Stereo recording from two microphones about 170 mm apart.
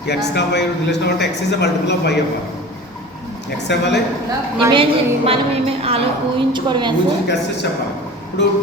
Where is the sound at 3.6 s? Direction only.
90° left.